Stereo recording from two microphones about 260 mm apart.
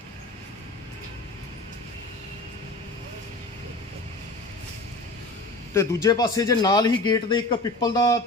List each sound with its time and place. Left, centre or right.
5.7 s speech: centre